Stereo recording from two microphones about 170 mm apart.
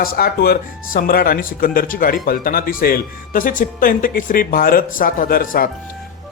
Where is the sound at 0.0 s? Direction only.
60° left (ahead or behind).